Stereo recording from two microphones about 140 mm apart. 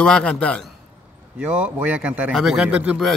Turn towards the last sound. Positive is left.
turn(degrees=-10)  # may be behind; listen again after turning